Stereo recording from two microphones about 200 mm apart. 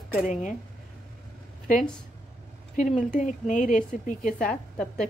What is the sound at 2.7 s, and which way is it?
Speech, 40° left (ahead or behind).